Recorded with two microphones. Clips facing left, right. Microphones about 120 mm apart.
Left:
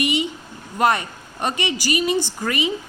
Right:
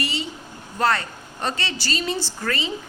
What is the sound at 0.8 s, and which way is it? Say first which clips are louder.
A woman's voice: left 3 dB; 15° left (ahead or behind).